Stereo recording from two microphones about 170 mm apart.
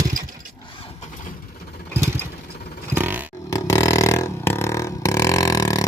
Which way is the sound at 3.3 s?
20° left (ahead or behind).